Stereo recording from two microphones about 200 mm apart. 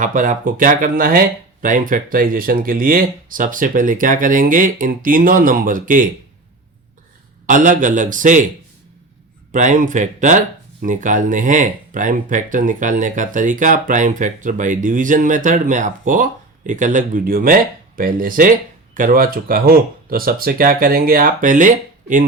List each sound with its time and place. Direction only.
0.0 s speech: 40° right (ahead or behind)
7.4 s speech: 40° right (ahead or behind)
9.5 s speech: 40° right (ahead or behind)